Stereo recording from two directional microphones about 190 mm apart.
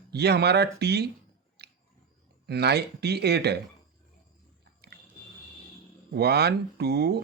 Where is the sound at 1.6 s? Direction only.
60° right (ahead or behind).